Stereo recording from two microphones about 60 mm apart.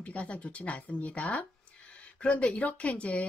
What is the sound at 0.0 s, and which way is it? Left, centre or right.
Speech, left.